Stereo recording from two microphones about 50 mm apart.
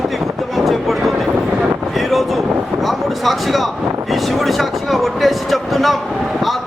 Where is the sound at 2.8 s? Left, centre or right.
Centre.